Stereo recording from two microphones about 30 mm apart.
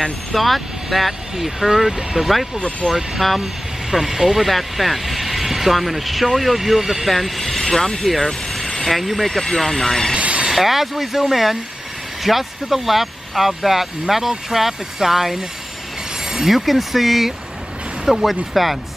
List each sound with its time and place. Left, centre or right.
0.3 s speech: centre
8.1 s vehicle: centre
8.8 s speech: centre
10.1 s a sound: right
10.5 s speech: centre